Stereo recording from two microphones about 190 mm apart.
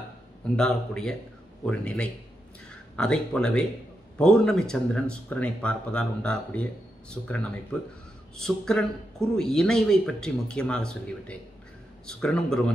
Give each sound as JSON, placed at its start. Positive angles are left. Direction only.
{"t": 0.6, "sound": "a man's voice", "side_deg": 5}